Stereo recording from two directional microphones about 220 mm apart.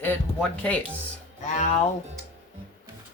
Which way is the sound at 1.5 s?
30° left (ahead or behind).